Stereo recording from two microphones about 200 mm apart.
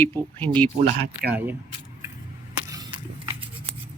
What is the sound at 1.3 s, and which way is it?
Speech, 10° right (ahead or behind).